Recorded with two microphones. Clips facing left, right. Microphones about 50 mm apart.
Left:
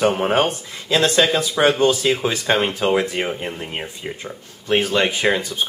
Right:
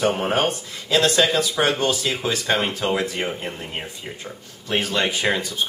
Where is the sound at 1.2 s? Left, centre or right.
Centre.